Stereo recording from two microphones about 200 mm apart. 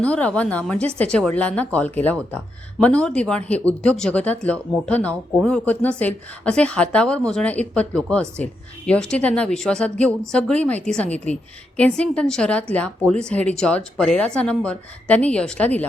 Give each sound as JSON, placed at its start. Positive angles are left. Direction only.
{"t": 0.0, "sound": "speech", "side_deg": 5}